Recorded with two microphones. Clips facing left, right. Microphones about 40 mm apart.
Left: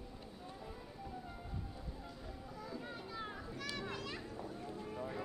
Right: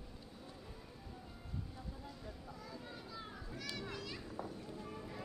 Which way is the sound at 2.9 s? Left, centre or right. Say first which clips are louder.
Left 4 dB; left.